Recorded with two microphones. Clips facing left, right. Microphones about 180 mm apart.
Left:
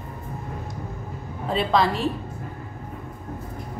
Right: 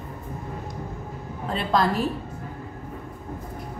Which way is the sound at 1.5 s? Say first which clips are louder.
Left 2 dB; centre (ahead or behind).